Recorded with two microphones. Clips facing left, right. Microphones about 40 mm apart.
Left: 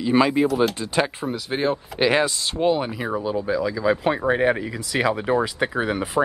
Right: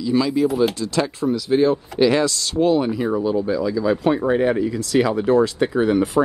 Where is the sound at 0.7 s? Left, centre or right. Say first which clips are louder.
Right 1 dB; left.